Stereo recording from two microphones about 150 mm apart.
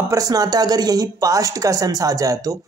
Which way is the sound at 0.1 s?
25° right (ahead or behind).